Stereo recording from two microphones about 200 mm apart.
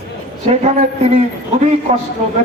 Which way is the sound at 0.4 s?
35° right (ahead or behind).